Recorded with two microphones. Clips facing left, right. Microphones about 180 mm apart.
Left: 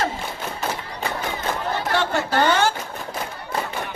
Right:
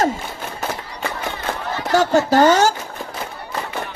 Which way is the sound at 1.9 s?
45° right (ahead or behind).